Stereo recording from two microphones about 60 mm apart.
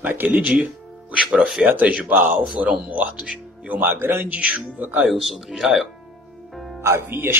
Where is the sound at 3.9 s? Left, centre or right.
Right.